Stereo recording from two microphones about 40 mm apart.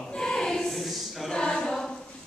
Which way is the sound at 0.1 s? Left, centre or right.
Centre.